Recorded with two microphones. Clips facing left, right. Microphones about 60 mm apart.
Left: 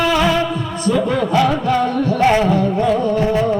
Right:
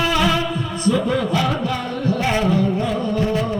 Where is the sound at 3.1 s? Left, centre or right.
Left.